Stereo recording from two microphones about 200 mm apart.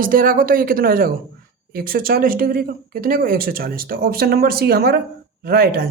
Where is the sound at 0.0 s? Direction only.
45° right (ahead or behind).